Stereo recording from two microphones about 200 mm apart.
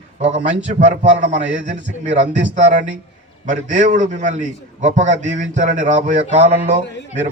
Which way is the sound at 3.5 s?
40° right (ahead or behind).